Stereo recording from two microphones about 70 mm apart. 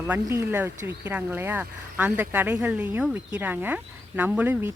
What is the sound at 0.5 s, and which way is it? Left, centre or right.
A woman's voice, right.